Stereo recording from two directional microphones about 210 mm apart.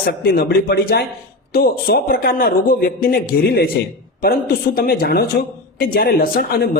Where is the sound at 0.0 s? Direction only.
45° left (ahead or behind).